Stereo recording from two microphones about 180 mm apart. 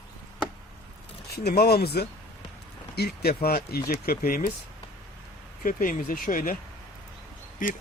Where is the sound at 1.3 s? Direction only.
60° left (ahead or behind).